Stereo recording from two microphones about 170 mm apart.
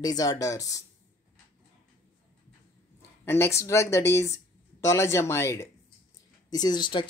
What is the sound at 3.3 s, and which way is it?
Speech, 15° left (ahead or behind).